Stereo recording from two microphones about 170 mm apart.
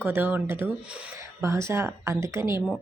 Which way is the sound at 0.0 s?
10° right (ahead or behind).